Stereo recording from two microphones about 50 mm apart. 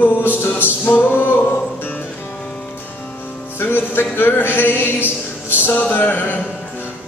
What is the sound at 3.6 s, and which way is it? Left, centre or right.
Music, left.